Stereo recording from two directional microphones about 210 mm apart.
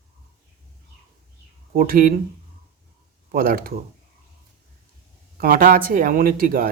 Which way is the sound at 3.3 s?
45° right (ahead or behind).